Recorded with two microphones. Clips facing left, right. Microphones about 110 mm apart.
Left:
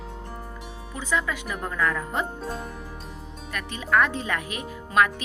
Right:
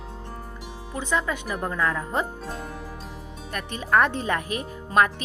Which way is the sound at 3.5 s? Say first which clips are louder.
Right 1 dB; 40° right (ahead or behind).